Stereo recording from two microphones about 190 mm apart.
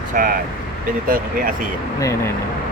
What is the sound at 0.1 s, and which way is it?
Speech, 50° right (ahead or behind).